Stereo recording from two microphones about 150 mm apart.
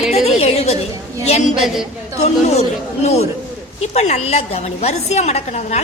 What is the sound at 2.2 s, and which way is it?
A woman's voice, 45° left (ahead or behind).